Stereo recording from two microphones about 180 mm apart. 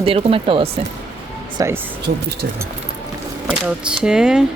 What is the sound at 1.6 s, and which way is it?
Speech, 15° right (ahead or behind).